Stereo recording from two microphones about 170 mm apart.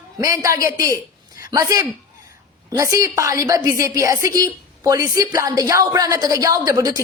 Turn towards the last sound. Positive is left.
turn(degrees=-20)  # may be behind; listen again after turning